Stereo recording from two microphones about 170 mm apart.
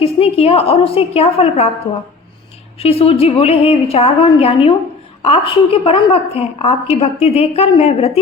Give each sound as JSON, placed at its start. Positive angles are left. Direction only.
{"t": 0.0, "sound": "a woman's voice", "side_deg": 35}
{"t": 2.7, "sound": "a woman's voice", "side_deg": 35}